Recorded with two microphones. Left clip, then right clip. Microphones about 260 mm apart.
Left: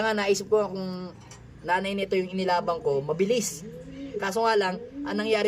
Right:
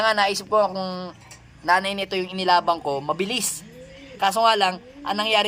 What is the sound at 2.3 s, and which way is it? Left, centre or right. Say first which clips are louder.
A man's voice: right 6 dB; centre.